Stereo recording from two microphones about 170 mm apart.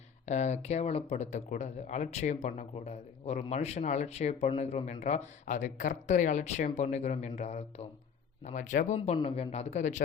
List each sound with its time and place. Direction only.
0.3 s speech: 40° left (ahead or behind)
9.1 s speech: 35° left (ahead or behind)